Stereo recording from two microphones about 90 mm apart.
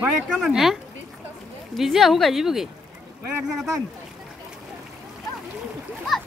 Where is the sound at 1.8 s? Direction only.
Centre (ahead or behind).